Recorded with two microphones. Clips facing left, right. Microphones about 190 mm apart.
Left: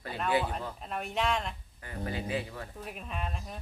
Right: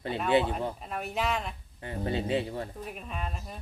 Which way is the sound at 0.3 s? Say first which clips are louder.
Right 4 dB; 25° right (ahead or behind).